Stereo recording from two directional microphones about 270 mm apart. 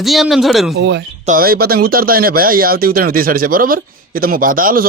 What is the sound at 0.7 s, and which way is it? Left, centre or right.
Speech, right.